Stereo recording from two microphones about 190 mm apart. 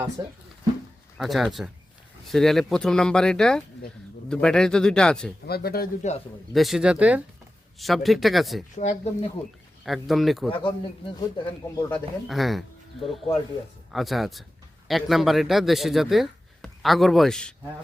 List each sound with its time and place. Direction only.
0.2 s speech: 25° right (ahead or behind)
1.2 s speech: centre (ahead or behind)
5.5 s speech: 55° left (ahead or behind)
6.0 s speech: 35° left (ahead or behind)
6.5 s speech: centre (ahead or behind)
8.7 s speech: 40° left (ahead or behind)
9.8 s speech: centre (ahead or behind)
11.2 s speech: 20° left (ahead or behind)
12.3 s speech: centre (ahead or behind)